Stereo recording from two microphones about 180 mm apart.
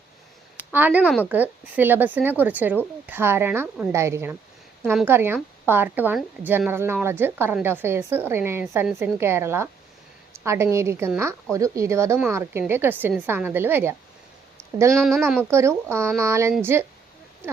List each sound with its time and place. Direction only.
0.7 s a woman's voice: 10° right (ahead or behind)
14.9 s speech: 5° left (ahead or behind)
15.4 s a woman's voice: 15° right (ahead or behind)